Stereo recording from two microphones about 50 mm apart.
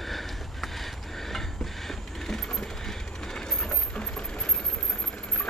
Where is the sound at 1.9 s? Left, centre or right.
Centre.